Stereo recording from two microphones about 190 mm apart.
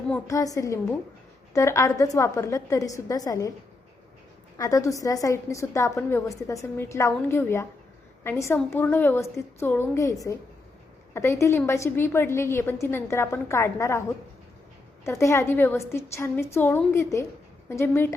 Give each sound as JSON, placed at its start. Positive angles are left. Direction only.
{"t": 0.3, "sound": "a woman's voice", "side_deg": 15}
{"t": 4.5, "sound": "a woman's voice", "side_deg": 15}
{"t": 15.0, "sound": "a woman's voice", "side_deg": 15}